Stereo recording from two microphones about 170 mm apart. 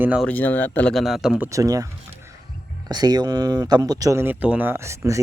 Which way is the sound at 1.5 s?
20° right (ahead or behind).